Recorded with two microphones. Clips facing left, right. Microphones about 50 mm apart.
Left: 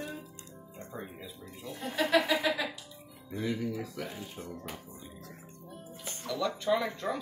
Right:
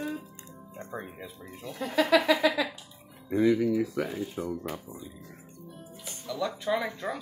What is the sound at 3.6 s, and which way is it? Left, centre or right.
Speech, right.